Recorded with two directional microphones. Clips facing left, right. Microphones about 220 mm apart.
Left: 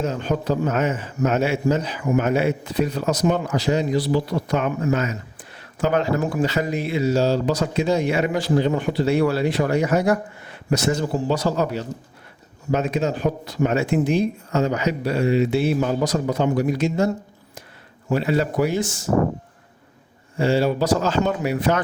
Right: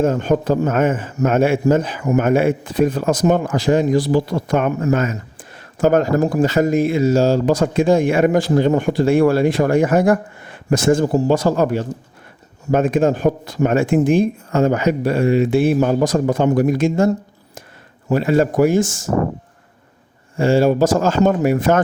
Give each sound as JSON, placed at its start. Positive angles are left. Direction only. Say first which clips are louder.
{"t": 0.0, "sound": "a man's voice", "louder": "right 7 dB", "side_deg": -50}
{"t": 18.1, "sound": "a man's voice", "louder": "right 5 dB", "side_deg": -45}
{"t": 20.3, "sound": "a man's voice", "louder": "right 5 dB", "side_deg": -50}